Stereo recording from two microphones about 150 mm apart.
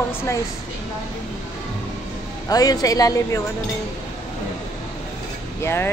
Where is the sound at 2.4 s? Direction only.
25° left (ahead or behind).